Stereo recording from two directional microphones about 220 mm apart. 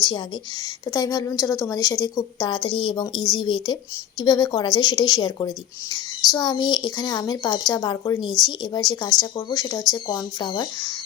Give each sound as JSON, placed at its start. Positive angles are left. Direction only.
{"t": 0.9, "sound": "speech", "side_deg": 15}